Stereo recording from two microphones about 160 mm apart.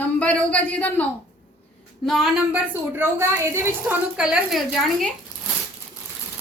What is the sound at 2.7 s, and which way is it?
A woman's voice, 15° right (ahead or behind).